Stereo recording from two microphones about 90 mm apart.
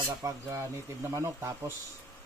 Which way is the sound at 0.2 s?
35° right (ahead or behind).